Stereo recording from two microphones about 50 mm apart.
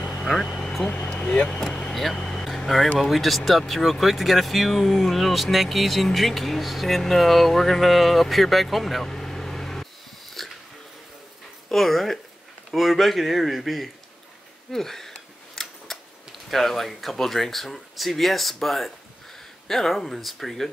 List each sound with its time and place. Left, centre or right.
0.3 s vehicle: centre
0.8 s speech: left
1.7 s vehicle: centre
2.3 s vehicle: centre
3.0 s speech: centre
9.1 s a sound: centre
11.7 s speech: centre
14.7 s scissors: centre
16.4 s speech: centre